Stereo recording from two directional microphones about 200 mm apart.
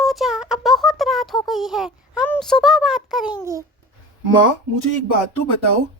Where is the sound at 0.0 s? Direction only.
Centre (ahead or behind).